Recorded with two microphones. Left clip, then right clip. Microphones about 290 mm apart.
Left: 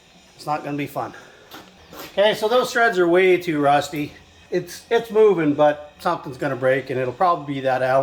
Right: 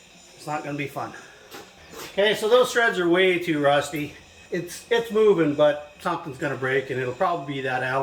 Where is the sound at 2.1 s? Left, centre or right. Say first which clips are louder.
Left 2 dB; centre.